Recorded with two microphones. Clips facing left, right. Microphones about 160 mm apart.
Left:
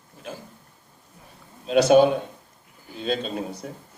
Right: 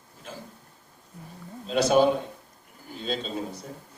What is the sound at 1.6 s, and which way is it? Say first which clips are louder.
Speech: left 6 dB; 75° left (ahead or behind).